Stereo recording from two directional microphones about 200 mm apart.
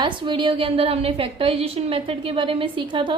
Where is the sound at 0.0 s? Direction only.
25° right (ahead or behind).